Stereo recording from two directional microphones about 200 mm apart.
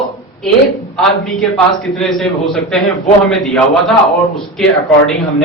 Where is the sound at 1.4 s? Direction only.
Centre (ahead or behind).